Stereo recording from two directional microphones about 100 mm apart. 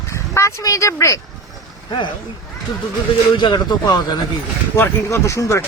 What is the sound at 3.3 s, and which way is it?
Speech, 50° left (ahead or behind).